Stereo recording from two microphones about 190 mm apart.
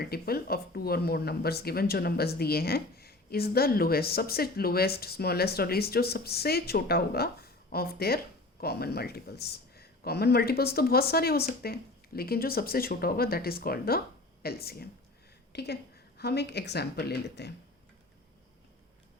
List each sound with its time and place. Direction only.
0.0 s speech: 55° left (ahead or behind)